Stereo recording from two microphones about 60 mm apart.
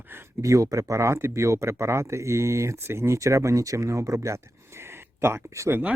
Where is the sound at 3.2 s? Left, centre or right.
Right.